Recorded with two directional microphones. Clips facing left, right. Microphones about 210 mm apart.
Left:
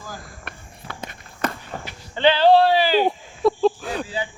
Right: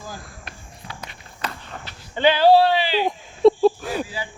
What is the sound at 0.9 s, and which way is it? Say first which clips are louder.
Walk: left 4 dB; 55° left (ahead or behind).